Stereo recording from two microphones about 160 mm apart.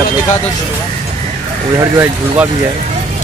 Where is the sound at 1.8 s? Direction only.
15° right (ahead or behind).